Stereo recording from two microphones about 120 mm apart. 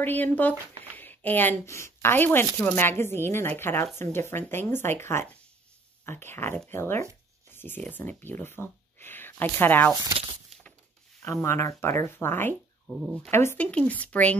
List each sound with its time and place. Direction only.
0.0 s speech: 15° left (ahead or behind)
11.2 s speech: 25° left (ahead or behind)
13.7 s speech: 10° left (ahead or behind)